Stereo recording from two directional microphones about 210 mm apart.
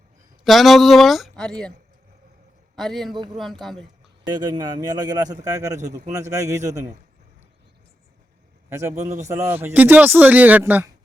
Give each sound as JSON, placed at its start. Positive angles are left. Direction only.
{"t": 0.4, "sound": "speech", "side_deg": 0}
{"t": 2.7, "sound": "speech", "side_deg": 0}
{"t": 4.3, "sound": "speech", "side_deg": -20}
{"t": 8.7, "sound": "speech", "side_deg": -15}